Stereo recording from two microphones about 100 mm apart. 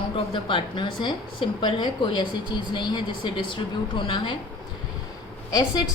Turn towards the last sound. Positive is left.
turn(degrees=35)  # may be behind; listen again after turning